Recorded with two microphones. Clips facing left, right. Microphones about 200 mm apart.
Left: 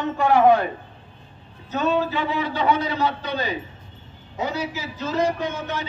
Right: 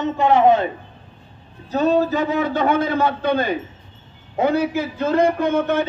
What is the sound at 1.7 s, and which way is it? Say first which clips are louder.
A man's voice: right 5 dB; 35° right (ahead or behind).